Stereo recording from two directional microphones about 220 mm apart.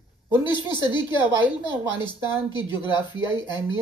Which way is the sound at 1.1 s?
5° right (ahead or behind).